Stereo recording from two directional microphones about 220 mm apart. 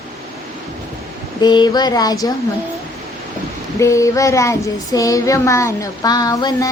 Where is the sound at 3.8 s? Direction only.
15° left (ahead or behind).